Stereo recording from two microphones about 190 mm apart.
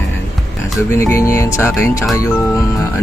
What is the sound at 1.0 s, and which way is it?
Speech, 15° left (ahead or behind).